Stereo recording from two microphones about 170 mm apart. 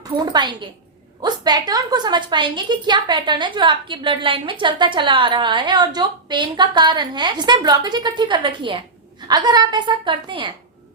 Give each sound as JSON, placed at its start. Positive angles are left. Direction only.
{"t": 1.2, "sound": "a woman's voice", "side_deg": -25}